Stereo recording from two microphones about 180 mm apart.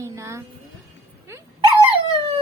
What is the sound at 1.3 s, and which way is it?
Dog, 15° right (ahead or behind).